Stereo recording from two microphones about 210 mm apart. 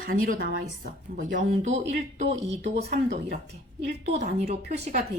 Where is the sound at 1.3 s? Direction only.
35° right (ahead or behind).